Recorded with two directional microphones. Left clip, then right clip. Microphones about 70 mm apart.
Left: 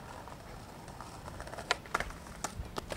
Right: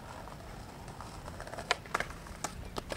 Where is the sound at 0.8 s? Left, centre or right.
Centre.